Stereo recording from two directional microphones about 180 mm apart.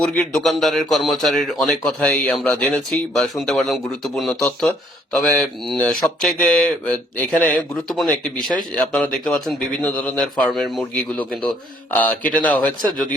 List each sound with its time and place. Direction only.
0.0 s a man's voice: 5° left (ahead or behind)